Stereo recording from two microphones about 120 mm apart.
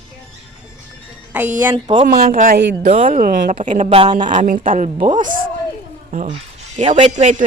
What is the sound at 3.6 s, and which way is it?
Speech, 85° right.